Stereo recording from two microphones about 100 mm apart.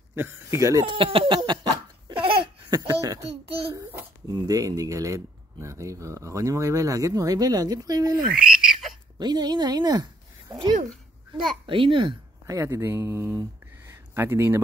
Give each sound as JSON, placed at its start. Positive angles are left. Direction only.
{"t": 0.1, "sound": "speech", "side_deg": -25}
{"t": 0.8, "sound": "laughter", "side_deg": -60}
{"t": 2.7, "sound": "speech", "side_deg": -35}
{"t": 4.3, "sound": "speech", "side_deg": -35}
{"t": 8.4, "sound": "frog", "side_deg": -5}
{"t": 9.2, "sound": "a woman's voice", "side_deg": -45}
{"t": 11.6, "sound": "a child's voice", "side_deg": -60}
{"t": 12.4, "sound": "speech", "side_deg": -30}